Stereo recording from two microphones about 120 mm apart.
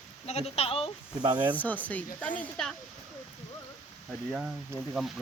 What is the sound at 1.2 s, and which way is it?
Speech, 40° right (ahead or behind).